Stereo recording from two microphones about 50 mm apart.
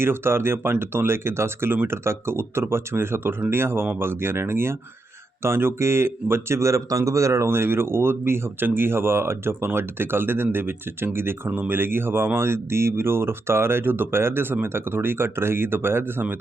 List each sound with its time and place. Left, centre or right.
0.0 s speech: right
7.4 s speech: right